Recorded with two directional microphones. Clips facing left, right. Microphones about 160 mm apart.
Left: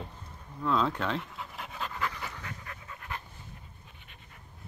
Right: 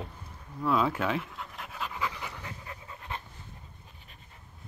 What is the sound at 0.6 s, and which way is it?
Pant, 10° right (ahead or behind).